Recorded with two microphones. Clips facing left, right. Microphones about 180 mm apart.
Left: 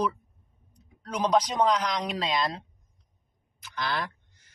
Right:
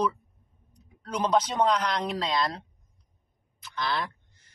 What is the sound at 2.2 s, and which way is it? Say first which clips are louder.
Speech: even; 20° left (ahead or behind).